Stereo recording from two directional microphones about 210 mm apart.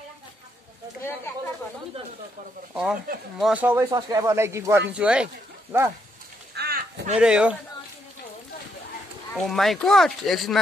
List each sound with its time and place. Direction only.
2.7 s speech: 5° right (ahead or behind)
6.5 s a sound: 50° right (ahead or behind)
7.2 s speech: 5° right (ahead or behind)
9.3 s speech: centre (ahead or behind)